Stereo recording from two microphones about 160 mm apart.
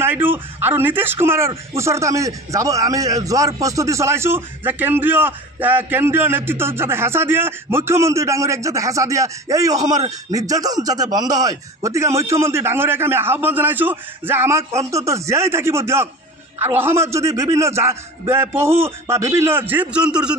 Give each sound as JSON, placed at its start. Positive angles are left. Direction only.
{"t": 0.0, "sound": "a man's voice", "side_deg": -15}